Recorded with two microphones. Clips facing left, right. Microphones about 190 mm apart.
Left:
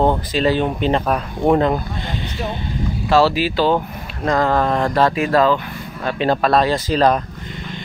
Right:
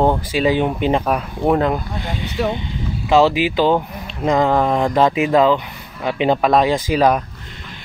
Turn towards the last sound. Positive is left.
turn(degrees=-10)  # may be behind; listen again after turning